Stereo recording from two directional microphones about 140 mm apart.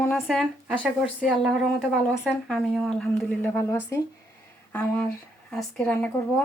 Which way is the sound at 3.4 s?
15° left (ahead or behind).